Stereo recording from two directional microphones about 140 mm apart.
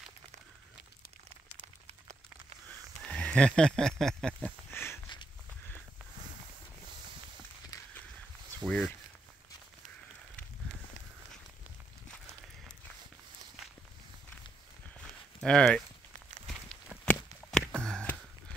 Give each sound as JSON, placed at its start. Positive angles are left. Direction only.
{"t": 3.0, "sound": "horse", "side_deg": 10}
{"t": 8.6, "sound": "speech", "side_deg": 0}
{"t": 15.4, "sound": "speech", "side_deg": 5}
{"t": 16.9, "sound": "walk", "side_deg": 5}
{"t": 17.7, "sound": "sniff", "side_deg": 5}